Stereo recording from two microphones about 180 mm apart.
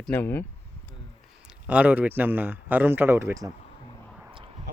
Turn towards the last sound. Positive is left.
turn(degrees=-15)  # may be behind; listen again after turning